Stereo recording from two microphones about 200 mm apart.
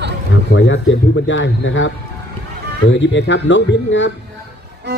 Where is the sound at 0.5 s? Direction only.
70° left (ahead or behind).